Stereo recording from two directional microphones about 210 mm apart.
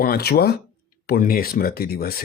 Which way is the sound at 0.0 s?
45° left (ahead or behind).